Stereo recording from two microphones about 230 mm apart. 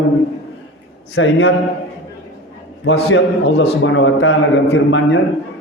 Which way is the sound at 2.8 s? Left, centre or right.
Left.